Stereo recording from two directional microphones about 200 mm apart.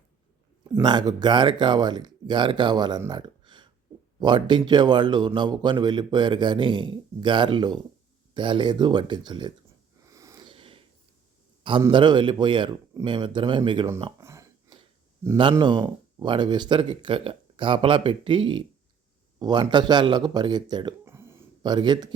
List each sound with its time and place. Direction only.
0.6 s a man's voice: 20° right (ahead or behind)
10.1 s sniff: 15° right (ahead or behind)
11.8 s a man's voice: 25° right (ahead or behind)
14.0 s a sound: 15° right (ahead or behind)
15.5 s a man's voice: 25° right (ahead or behind)